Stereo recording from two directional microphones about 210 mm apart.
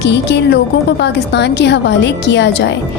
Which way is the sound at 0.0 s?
55° left (ahead or behind).